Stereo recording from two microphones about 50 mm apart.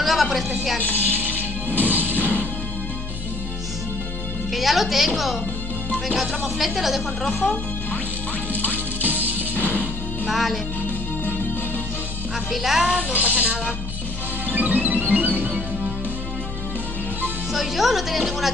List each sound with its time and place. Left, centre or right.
0.0 s music: centre
1.8 s music: right
4.6 s a woman's voice: centre
9.0 s music: right
10.2 s music: centre
12.4 s speech: centre
12.8 s speech: right
14.5 s music: right
17.5 s speech: centre